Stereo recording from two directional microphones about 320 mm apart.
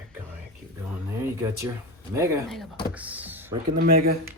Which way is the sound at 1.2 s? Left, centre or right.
Centre.